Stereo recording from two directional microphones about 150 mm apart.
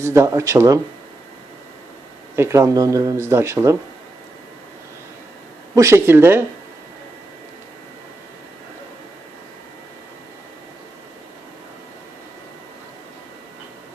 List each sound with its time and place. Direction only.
0.0 s speech: 20° right (ahead or behind)
2.3 s speech: 20° right (ahead or behind)
5.7 s speech: 20° right (ahead or behind)